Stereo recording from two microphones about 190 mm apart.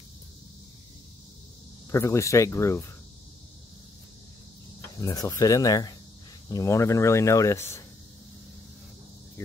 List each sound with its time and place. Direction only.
1.9 s speech: 15° left (ahead or behind)
5.0 s speech: 20° left (ahead or behind)